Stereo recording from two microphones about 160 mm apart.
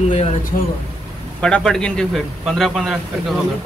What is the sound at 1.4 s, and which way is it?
A man's voice, 5° left (ahead or behind).